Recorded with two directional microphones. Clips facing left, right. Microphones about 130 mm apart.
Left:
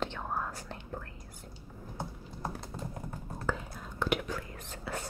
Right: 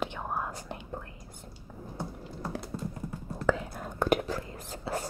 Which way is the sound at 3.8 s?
50° right (ahead or behind).